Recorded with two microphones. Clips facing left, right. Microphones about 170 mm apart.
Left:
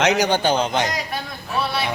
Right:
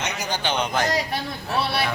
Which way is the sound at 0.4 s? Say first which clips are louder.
Left 4 dB; 35° left (ahead or behind).